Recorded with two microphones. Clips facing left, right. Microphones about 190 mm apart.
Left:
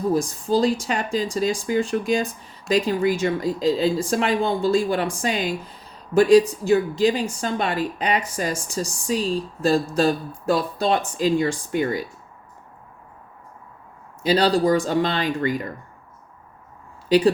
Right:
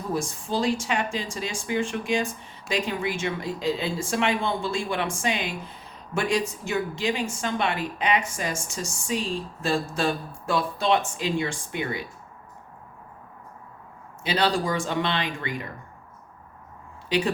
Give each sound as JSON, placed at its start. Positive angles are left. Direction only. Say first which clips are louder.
{"t": 0.1, "sound": "a woman's voice", "louder": "left 5 dB", "side_deg": 35}
{"t": 14.2, "sound": "a woman's voice", "louder": "left 6 dB", "side_deg": 40}
{"t": 17.1, "sound": "speech", "louder": "left 8 dB", "side_deg": 35}